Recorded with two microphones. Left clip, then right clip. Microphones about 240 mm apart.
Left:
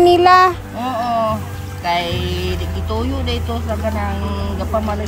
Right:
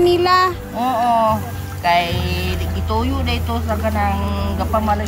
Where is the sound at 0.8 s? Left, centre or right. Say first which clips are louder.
Right 3 dB; centre.